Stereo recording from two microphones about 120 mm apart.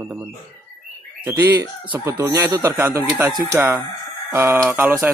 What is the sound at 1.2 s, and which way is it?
Speech, 15° right (ahead or behind).